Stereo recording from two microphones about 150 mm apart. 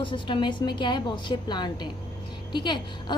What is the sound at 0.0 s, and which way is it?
A woman's voice, 35° left (ahead or behind).